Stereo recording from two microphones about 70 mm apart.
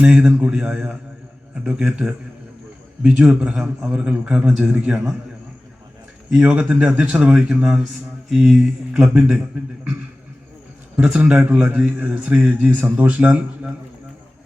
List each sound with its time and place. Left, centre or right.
0.0 s a man's voice: centre
6.3 s a man's voice: centre
8.9 s a man's voice: centre
10.9 s a man's voice: centre